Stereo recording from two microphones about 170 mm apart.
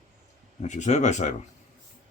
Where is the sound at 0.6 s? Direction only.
45° left (ahead or behind).